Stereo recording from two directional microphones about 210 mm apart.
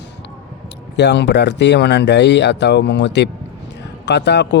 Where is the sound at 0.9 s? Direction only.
55° left (ahead or behind).